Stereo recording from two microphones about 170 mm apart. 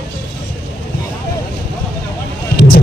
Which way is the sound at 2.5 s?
90° left.